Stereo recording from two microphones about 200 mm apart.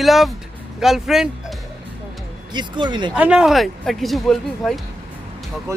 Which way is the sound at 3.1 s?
5° right (ahead or behind).